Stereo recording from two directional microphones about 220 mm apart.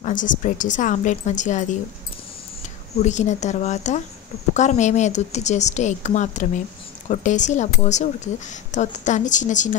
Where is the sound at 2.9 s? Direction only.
30° left (ahead or behind).